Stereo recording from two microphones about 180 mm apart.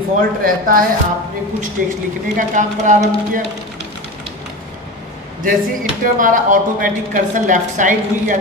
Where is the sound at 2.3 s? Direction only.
45° right (ahead or behind).